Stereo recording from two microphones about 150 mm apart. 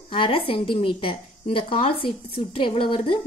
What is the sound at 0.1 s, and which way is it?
A woman's voice, 35° left (ahead or behind).